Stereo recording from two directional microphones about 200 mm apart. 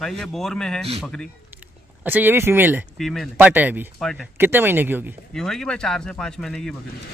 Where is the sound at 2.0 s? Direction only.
10° right (ahead or behind).